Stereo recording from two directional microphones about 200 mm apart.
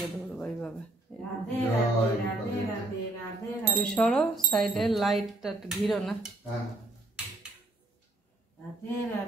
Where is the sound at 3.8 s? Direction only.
5° left (ahead or behind).